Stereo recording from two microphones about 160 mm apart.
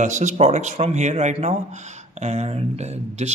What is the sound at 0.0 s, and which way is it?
Speech, 50° right (ahead or behind).